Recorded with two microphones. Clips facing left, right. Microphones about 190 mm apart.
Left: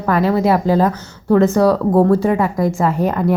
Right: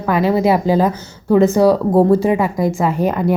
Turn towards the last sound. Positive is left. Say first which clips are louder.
# even
turn(degrees=0)  # may be behind; listen again after turning